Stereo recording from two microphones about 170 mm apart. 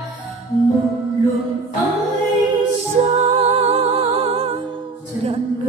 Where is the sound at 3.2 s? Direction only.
35° right (ahead or behind).